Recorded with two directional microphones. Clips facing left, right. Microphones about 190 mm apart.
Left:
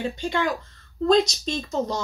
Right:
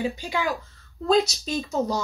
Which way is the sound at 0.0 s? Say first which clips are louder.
Left 1 dB; 5° right (ahead or behind).